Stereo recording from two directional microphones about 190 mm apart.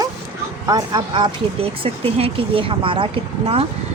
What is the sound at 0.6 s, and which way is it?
Speech, 20° right (ahead or behind).